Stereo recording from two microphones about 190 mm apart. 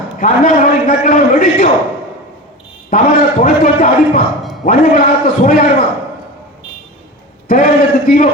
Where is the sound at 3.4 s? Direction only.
50° left (ahead or behind).